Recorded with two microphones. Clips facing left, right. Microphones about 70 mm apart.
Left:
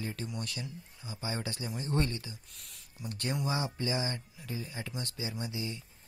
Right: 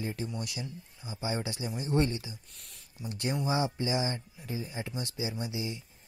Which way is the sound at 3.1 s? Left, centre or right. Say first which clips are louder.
Right 3 dB; centre.